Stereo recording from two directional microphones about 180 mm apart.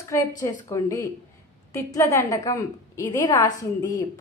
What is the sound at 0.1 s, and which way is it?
A woman's voice, 20° left (ahead or behind).